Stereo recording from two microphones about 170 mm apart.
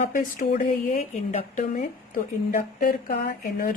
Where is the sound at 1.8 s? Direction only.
55° left (ahead or behind).